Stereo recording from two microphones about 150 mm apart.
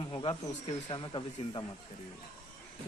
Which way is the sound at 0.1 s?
35° left (ahead or behind).